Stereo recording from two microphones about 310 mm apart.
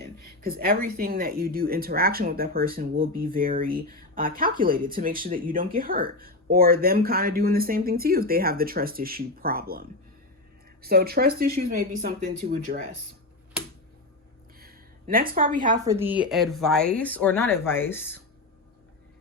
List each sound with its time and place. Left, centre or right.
0.0 s speech: right
14.6 s a sound: right
15.5 s speech: right
15.8 s speech: centre